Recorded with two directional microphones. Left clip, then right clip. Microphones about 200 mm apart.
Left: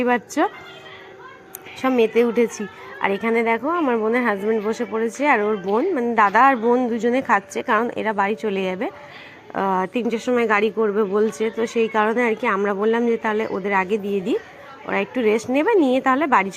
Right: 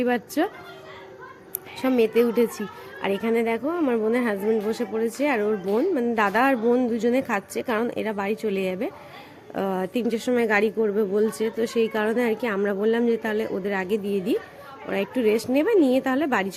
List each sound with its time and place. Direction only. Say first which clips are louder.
0.0 s a woman's voice: left 4 dB; centre (ahead or behind)
1.8 s a woman's voice: left 3 dB; centre (ahead or behind)